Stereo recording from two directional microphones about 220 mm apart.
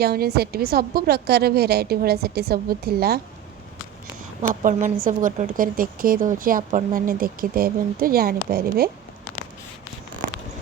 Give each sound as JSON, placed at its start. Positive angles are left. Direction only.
{"t": 0.0, "sound": "a woman's voice", "side_deg": -45}
{"t": 4.6, "sound": "speech", "side_deg": -35}